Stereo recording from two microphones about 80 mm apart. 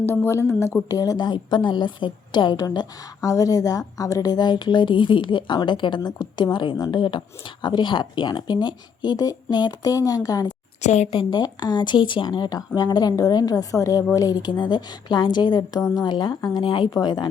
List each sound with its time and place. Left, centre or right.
0.0 s speech: left
0.9 s speech: left
2.6 s a woman's voice: left
6.0 s speech: left
7.6 s speech: left
11.1 s speech: left
12.5 s a woman's voice: left
16.3 s speech: left
16.6 s a woman's voice: left